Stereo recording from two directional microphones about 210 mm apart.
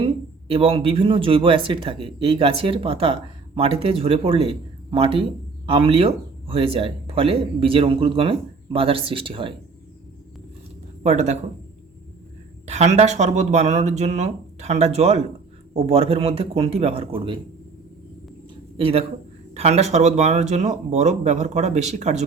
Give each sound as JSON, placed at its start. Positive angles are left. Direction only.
{"t": 0.0, "sound": "speech", "side_deg": -25}
{"t": 11.0, "sound": "speech", "side_deg": -30}
{"t": 12.6, "sound": "speech", "side_deg": -30}
{"t": 18.8, "sound": "speech", "side_deg": -25}